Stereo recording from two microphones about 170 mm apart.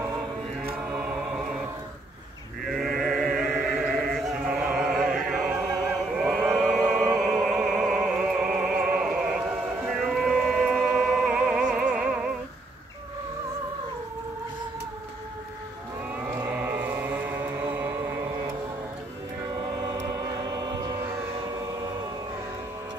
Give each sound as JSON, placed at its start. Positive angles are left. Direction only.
{"t": 0.7, "sound": "music", "side_deg": -5}
{"t": 2.6, "sound": "chant", "side_deg": 0}
{"t": 16.2, "sound": "chant", "side_deg": -10}
{"t": 17.7, "sound": "a sound", "side_deg": -15}
{"t": 19.8, "sound": "music", "side_deg": -25}